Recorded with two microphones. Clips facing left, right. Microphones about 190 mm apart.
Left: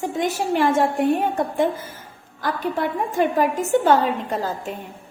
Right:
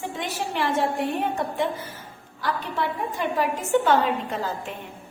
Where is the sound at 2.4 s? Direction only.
45° left (ahead or behind).